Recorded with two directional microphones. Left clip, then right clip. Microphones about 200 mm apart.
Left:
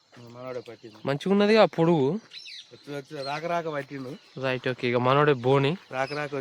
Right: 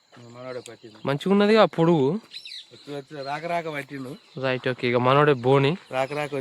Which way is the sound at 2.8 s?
Centre (ahead or behind).